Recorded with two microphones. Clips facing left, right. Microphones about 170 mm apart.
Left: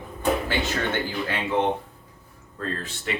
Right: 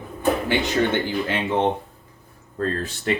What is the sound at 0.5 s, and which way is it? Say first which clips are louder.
Speech: right 4 dB; 20° right (ahead or behind).